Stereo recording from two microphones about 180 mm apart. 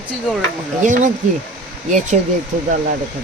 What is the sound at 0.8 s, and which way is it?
Speech, 45° right (ahead or behind).